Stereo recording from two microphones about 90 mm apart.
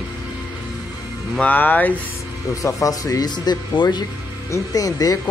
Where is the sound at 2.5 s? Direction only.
40° left (ahead or behind); by 4.0 s 55° left (ahead or behind).